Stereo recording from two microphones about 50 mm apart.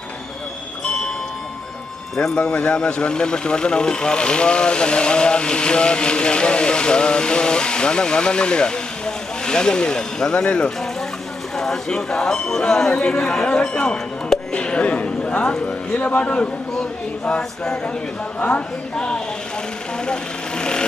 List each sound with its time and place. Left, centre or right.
2.1 s speech: centre
11.5 s speech: centre
15.9 s a sound: left
18.3 s a sound: left
18.9 s speech: centre
20.6 s sewing machine: centre